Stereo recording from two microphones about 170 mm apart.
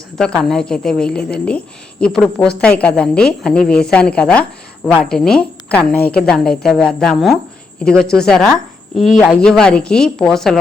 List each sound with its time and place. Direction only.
0.2 s a woman's voice: 5° left (ahead or behind)